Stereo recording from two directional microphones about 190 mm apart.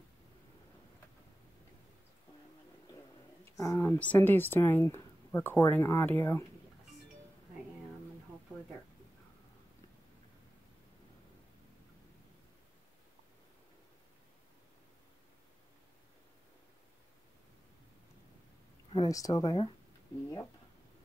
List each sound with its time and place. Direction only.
3.4 s speech: 15° left (ahead or behind)
18.9 s speech: 20° left (ahead or behind)